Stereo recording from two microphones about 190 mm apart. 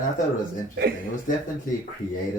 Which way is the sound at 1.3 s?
45° left (ahead or behind).